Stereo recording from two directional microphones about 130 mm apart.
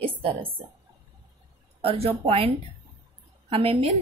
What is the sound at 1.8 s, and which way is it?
Speech, 50° right (ahead or behind).